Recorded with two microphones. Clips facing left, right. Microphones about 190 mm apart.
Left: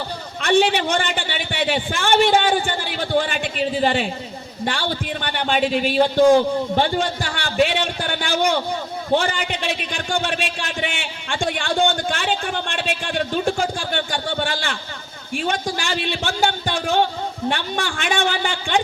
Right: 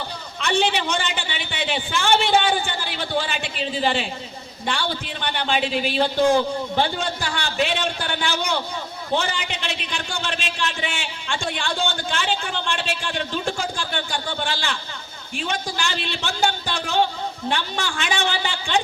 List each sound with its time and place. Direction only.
0.3 s a man's voice: 50° left (ahead or behind)